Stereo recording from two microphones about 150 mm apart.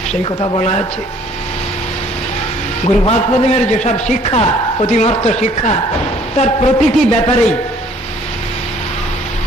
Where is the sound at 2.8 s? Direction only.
45° left (ahead or behind).